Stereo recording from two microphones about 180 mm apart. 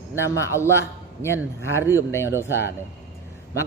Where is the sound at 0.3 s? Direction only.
15° left (ahead or behind).